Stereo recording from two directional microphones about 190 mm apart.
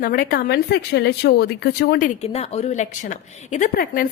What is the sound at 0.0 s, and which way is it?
Speech, 50° left (ahead or behind).